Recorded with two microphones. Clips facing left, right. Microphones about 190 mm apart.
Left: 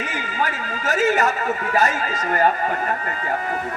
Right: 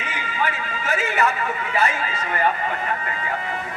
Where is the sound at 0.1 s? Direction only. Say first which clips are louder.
Left 1 dB; 45° left (ahead or behind).